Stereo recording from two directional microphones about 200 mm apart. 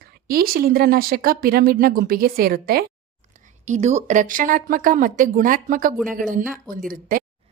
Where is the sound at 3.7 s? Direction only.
35° right (ahead or behind).